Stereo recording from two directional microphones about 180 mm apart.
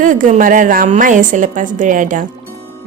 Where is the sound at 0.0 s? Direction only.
45° right (ahead or behind).